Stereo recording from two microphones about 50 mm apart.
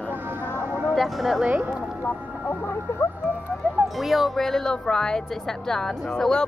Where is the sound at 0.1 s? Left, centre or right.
Right.